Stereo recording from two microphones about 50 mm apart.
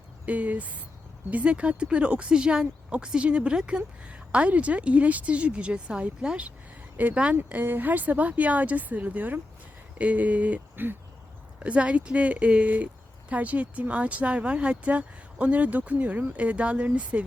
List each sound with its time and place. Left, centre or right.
0.3 s speech: right
7.6 s speech: right
10.8 s speech: right
11.6 s speech: right